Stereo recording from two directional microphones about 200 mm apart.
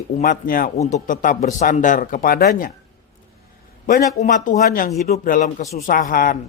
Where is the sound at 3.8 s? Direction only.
40° left (ahead or behind).